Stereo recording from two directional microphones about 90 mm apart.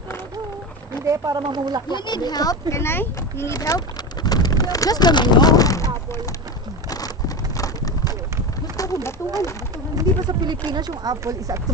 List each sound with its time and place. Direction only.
1.0 s speech: 40° right (ahead or behind)
1.5 s speech: 50° right (ahead or behind)
1.9 s speech: 55° left (ahead or behind); by 3.6 s 35° left (ahead or behind)
3.6 s pigeon: 50° left (ahead or behind)
8.8 s a sound: 40° left (ahead or behind)
10.0 s speech: 50° right (ahead or behind)
11.2 s speech: 35° right (ahead or behind)